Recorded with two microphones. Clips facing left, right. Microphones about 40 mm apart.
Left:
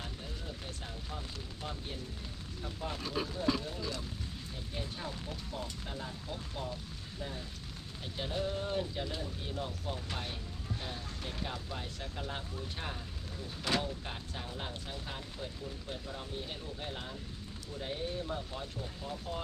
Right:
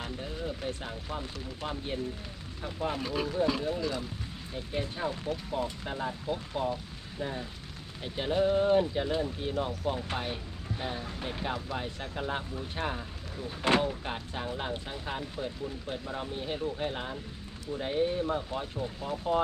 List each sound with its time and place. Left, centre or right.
0.0 s a sound: right
1.6 s speech: right
2.8 s speech: right
3.8 s speech: centre
4.5 s speech: right